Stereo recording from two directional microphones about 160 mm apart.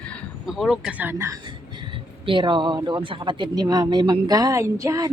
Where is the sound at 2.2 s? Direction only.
30° right (ahead or behind).